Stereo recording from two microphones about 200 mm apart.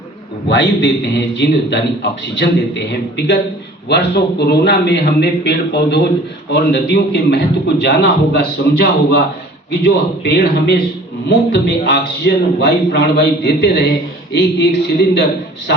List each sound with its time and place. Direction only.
0.4 s a man's voice: 60° left (ahead or behind)
9.8 s a man's voice: 55° left (ahead or behind)